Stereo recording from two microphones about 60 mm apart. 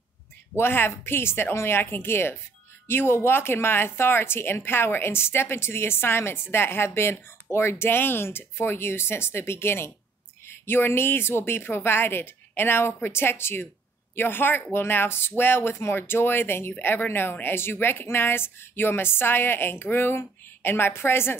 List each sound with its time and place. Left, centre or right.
0.6 s speech: left